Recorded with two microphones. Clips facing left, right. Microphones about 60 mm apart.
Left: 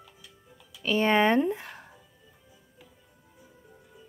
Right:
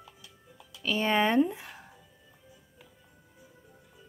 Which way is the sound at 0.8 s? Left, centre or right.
Left.